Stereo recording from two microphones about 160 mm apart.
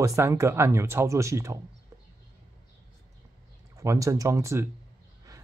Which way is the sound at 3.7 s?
20° right (ahead or behind).